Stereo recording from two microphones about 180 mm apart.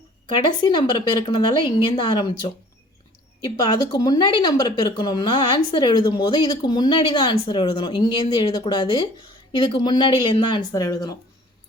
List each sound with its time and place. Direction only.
0.4 s speech: 25° left (ahead or behind)